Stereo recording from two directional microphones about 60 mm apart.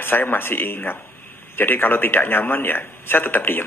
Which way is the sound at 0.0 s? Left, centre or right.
Left.